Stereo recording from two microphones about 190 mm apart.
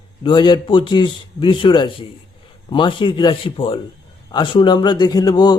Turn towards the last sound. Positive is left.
turn(degrees=20)  # may be behind; listen again after turning